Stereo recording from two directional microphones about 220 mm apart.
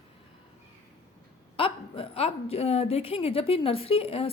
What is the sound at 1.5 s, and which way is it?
A woman's voice, 25° left (ahead or behind).